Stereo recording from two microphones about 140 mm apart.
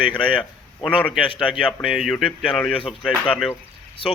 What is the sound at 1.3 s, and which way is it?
Speech, 35° left (ahead or behind).